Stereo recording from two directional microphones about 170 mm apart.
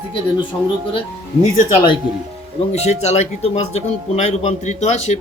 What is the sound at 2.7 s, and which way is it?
Speech, 40° left (ahead or behind).